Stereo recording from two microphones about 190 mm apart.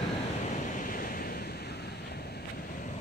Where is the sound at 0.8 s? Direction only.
50° left (ahead or behind).